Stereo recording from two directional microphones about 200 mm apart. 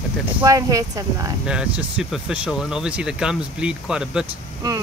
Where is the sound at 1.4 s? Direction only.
5° right (ahead or behind).